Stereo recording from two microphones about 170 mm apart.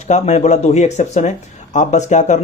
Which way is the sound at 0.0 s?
45° left (ahead or behind).